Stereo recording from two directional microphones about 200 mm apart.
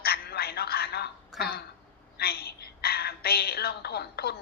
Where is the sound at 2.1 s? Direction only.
50° left (ahead or behind).